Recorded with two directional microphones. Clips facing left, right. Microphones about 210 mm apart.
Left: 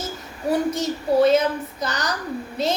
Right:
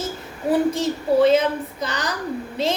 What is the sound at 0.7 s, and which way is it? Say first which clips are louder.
A woman's voice: right 1 dB; 30° right (ahead or behind).